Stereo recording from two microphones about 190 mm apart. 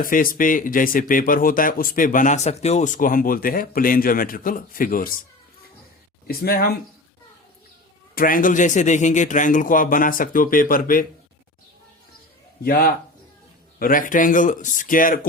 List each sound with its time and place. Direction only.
0.0 s speech: 45° left (ahead or behind)
6.2 s speech: 50° left (ahead or behind)
8.1 s speech: 50° left (ahead or behind)
12.6 s speech: 50° left (ahead or behind)